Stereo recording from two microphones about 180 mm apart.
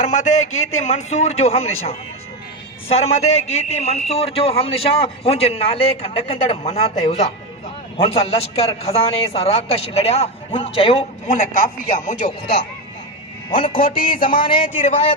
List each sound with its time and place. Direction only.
0.0 s a man's voice: 45° left (ahead or behind)
2.9 s a man's voice: 35° left (ahead or behind)
11.3 s a man's voice: 50° left (ahead or behind)
13.5 s music: 30° left (ahead or behind)
14.8 s a man's voice: 35° left (ahead or behind)